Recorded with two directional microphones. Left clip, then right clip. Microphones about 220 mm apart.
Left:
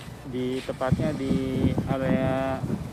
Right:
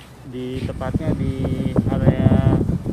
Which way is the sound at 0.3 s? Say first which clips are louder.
Right 1 dB; centre (ahead or behind).